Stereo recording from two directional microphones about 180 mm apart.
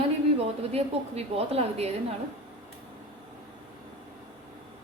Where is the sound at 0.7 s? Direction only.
35° right (ahead or behind).